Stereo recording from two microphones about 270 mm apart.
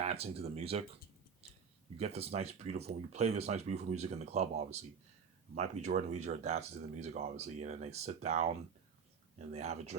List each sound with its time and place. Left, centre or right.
0.0 s speech: right
2.0 s speech: right
5.8 s speech: right
9.5 s speech: right